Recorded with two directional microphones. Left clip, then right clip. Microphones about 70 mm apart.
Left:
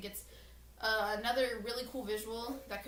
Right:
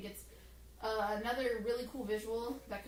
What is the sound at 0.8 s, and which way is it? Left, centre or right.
A woman's voice, left.